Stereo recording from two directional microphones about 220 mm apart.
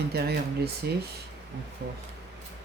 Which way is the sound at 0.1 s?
45° right (ahead or behind).